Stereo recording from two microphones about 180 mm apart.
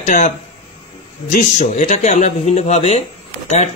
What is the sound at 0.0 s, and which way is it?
Speech, 45° left (ahead or behind).